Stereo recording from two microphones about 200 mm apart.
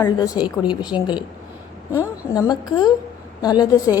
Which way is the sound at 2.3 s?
20° left (ahead or behind).